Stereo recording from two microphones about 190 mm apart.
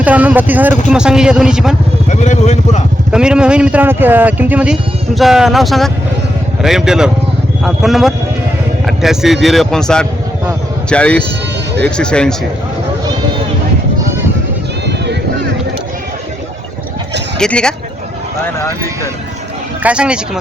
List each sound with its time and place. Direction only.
0.0 s speech: 10° right (ahead or behind)
2.0 s speech: 40° left (ahead or behind)
3.1 s speech: 5° right (ahead or behind)
14.8 s run: 65° right (ahead or behind)
17.3 s speech: 5° left (ahead or behind)
19.8 s speech: 5° right (ahead or behind)